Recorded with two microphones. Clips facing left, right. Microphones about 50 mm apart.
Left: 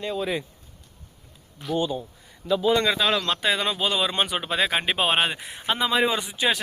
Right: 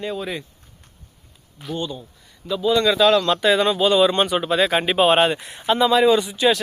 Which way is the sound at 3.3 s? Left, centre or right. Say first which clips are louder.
Right 7 dB; centre.